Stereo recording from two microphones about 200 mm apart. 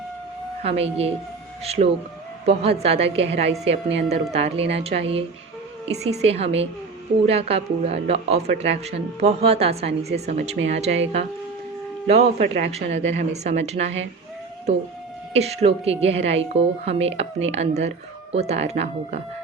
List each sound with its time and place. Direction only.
0.6 s a woman's voice: 30° right (ahead or behind)
10.0 s speech: 55° right (ahead or behind)
10.7 s a woman's voice: 35° right (ahead or behind)
15.3 s a woman's voice: 30° right (ahead or behind)